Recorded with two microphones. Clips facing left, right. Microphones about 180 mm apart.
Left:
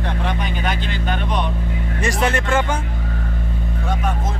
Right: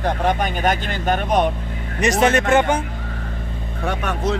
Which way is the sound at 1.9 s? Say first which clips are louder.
Right 5 dB; 20° right (ahead or behind).